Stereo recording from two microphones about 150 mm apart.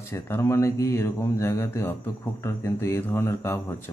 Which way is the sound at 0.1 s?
20° left (ahead or behind).